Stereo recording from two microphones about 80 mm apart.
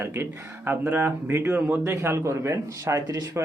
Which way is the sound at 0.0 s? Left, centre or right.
Right.